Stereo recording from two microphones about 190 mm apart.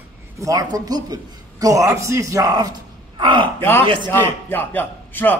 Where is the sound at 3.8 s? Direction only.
25° right (ahead or behind).